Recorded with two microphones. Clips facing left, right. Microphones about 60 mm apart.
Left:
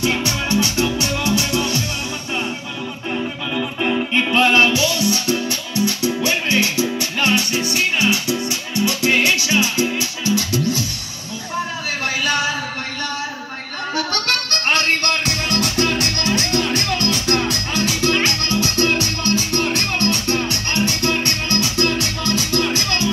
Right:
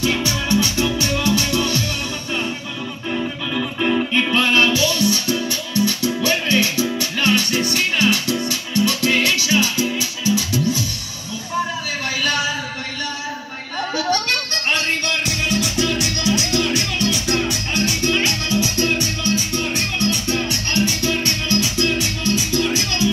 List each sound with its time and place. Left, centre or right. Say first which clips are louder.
0.3 s music: even; left
3.5 s music: right 1 dB; centre
4.3 s music: left 3 dB; left
5.5 s music: right 1 dB; right
6.0 s music: even; centre
7.5 s music: even; centre; by 10.0 s left
10.2 s music: even; right
14.1 s music: even; left
15.7 s music: left 1 dB; left
20.7 s music: even; left